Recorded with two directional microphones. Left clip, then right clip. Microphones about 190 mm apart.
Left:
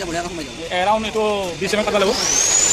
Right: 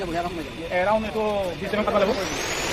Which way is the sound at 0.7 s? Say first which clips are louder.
Left 4 dB; 45° left (ahead or behind).